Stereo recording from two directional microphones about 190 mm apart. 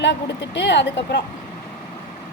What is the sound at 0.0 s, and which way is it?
Speech, 65° left (ahead or behind).